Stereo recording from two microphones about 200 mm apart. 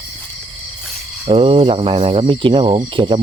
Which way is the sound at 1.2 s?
25° right (ahead or behind).